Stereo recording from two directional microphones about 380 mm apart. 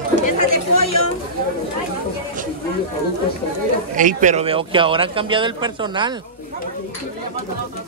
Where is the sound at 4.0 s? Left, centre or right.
Centre.